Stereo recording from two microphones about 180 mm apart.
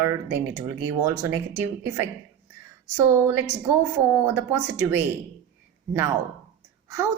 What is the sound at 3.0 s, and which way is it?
A woman's voice, 15° right (ahead or behind).